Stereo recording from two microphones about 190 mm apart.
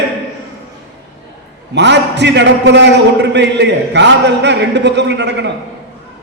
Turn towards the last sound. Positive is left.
turn(degrees=-65)  # may be behind; listen again after turning